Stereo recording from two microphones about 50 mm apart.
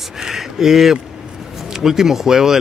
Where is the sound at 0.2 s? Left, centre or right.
Centre.